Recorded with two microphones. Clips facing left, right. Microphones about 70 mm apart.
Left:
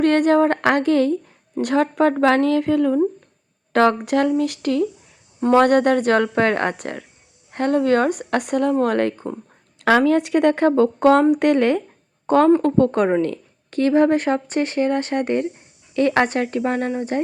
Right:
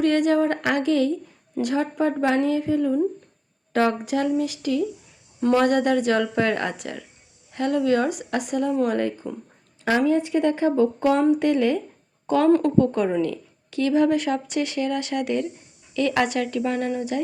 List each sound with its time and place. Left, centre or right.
0.0 s a woman's voice: left
1.6 s a woman's voice: left
9.7 s a sound: left
10.1 s speech: left
12.2 s a woman's voice: left